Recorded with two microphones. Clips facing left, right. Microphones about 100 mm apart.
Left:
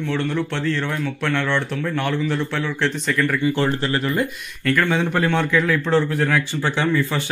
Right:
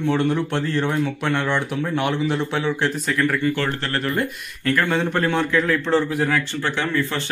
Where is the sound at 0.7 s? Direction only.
15° right (ahead or behind).